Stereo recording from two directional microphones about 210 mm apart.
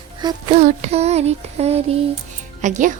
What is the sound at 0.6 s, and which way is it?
Child singing, 30° right (ahead or behind).